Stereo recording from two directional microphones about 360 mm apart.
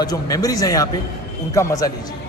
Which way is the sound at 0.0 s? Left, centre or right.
Centre.